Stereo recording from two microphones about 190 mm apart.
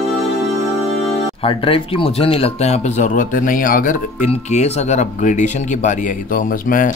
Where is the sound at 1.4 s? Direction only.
30° left (ahead or behind); by 3.9 s 45° left (ahead or behind).